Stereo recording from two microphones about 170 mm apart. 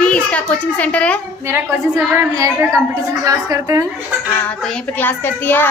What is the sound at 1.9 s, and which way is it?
A woman's voice, 15° right (ahead or behind).